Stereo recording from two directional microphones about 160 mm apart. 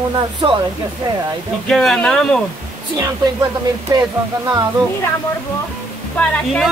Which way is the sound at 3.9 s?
25° right (ahead or behind).